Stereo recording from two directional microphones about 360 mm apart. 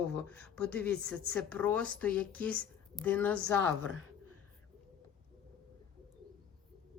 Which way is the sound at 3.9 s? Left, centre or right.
Left.